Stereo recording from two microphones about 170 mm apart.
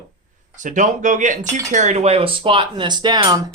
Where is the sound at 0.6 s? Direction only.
50° right (ahead or behind).